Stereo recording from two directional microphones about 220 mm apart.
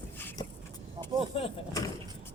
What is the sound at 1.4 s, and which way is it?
Vehicle, 15° left (ahead or behind).